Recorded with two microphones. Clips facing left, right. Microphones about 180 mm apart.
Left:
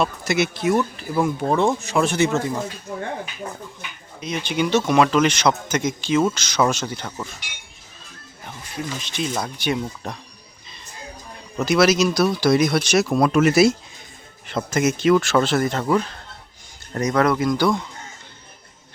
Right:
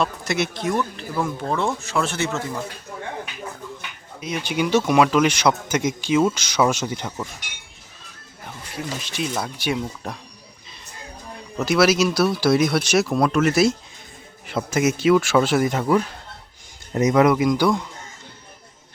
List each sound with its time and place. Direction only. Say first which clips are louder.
0.0 s speech: left 2 dB; 5° left (ahead or behind)
4.2 s a man's voice: left 1 dB; 10° right (ahead or behind)
9.0 s a man's voice: left 1 dB; 10° right (ahead or behind)
11.5 s speech: left 1 dB; 5° right (ahead or behind)
13.3 s speech: left 4 dB; 10° left (ahead or behind)
14.4 s a man's voice: even; 5° right (ahead or behind)